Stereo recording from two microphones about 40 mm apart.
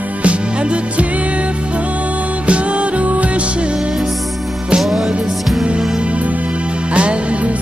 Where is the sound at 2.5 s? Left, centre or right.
Right.